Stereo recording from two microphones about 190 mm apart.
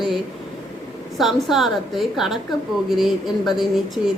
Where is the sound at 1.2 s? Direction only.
Centre (ahead or behind).